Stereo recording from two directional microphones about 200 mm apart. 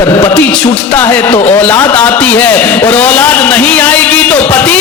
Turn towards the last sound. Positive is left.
turn(degrees=5)  # may be behind; listen again after turning